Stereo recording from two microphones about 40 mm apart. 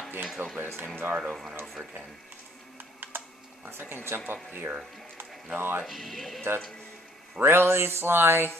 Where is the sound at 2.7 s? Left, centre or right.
Right.